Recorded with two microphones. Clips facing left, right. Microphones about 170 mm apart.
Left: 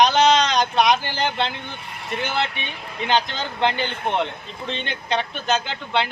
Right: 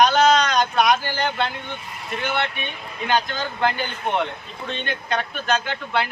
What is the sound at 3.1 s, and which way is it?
Speech, 25° left (ahead or behind).